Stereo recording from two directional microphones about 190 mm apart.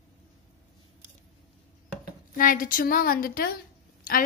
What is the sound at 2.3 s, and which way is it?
A woman's voice, 45° left (ahead or behind).